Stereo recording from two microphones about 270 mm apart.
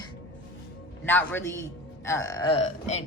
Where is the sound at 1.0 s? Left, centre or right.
Centre.